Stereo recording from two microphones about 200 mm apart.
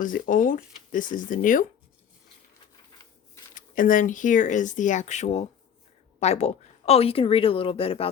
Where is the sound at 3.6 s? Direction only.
40° left (ahead or behind).